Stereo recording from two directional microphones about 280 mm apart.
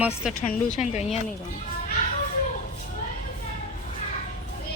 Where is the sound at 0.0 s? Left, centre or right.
Centre.